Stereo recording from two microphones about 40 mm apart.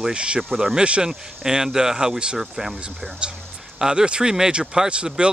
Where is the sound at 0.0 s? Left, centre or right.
Right.